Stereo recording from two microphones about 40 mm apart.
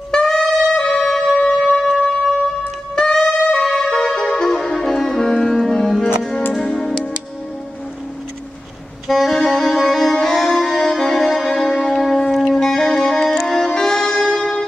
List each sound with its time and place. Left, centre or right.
0.1 s saxophone: centre
0.8 s music: centre
1.8 s music: centre
3.0 s music: left
9.0 s saxophone: centre
10.2 s music: centre
12.4 s music: centre